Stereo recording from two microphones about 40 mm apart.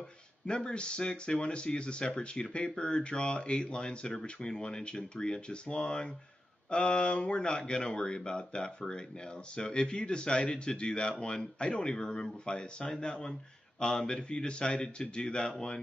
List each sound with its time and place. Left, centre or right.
0.5 s speech: left